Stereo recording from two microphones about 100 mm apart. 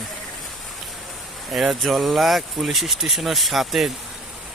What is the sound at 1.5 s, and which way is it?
Speech, centre (ahead or behind).